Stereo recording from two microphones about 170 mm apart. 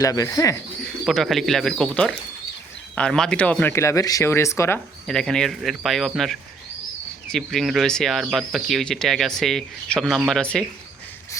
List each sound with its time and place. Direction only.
0.0 s speech: 20° left (ahead or behind)
1.0 s speech: centre (ahead or behind)
5.0 s speech: 5° left (ahead or behind)